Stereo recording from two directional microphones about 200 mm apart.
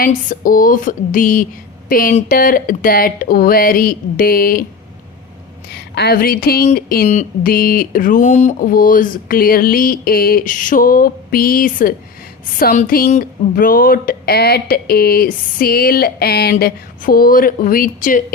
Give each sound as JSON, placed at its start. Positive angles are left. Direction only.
{"t": 0.0, "sound": "speech", "side_deg": 40}
{"t": 5.7, "sound": "speech", "side_deg": 55}